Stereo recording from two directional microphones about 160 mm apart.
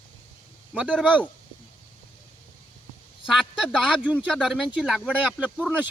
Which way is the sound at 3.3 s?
5° right (ahead or behind).